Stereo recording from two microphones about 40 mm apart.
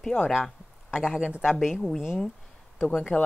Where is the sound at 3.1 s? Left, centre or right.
Left.